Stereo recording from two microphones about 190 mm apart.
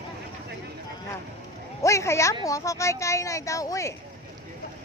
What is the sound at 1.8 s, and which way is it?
A woman's voice, 15° left (ahead or behind).